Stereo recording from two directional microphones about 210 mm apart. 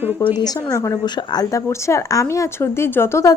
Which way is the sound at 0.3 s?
20° left (ahead or behind).